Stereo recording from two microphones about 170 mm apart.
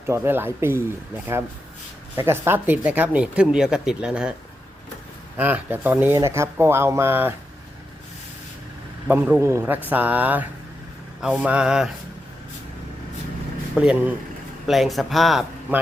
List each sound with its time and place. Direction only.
0.0 s speech: 15° right (ahead or behind)
5.4 s speech: 10° right (ahead or behind)
9.0 s speech: 10° right (ahead or behind)
13.7 s speech: 5° right (ahead or behind)